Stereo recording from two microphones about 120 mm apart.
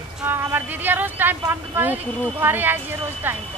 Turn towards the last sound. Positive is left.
turn(degrees=-15)  # may be behind; listen again after turning